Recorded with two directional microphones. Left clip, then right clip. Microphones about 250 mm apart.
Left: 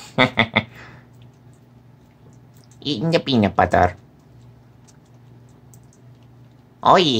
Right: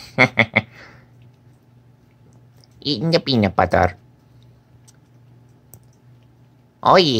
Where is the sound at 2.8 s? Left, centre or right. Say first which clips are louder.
Right 1 dB; centre.